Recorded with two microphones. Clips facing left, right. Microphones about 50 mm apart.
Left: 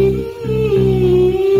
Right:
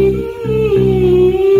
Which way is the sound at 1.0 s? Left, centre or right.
Centre.